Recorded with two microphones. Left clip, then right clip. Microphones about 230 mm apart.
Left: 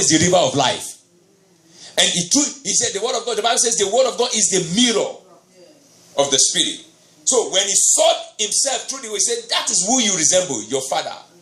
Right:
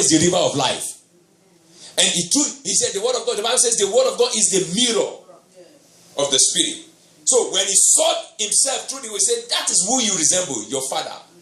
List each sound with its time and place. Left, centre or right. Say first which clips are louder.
0.0 s speech: left 2 dB; left
1.8 s speech: left 2 dB; left
6.2 s speech: left 2 dB; left